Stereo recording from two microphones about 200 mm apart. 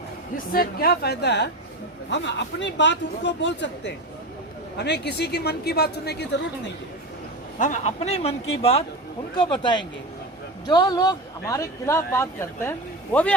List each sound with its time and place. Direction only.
0.5 s a woman's voice: 50° left (ahead or behind)
7.6 s speech: 35° left (ahead or behind); by 13.3 s 10° left (ahead or behind)